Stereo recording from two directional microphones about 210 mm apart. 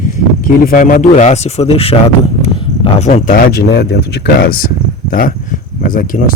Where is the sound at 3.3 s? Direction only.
45° left (ahead or behind).